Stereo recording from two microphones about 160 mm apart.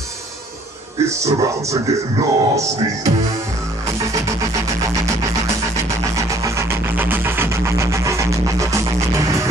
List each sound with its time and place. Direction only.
1.0 s music: 20° right (ahead or behind)
6.1 s music: 20° right (ahead or behind)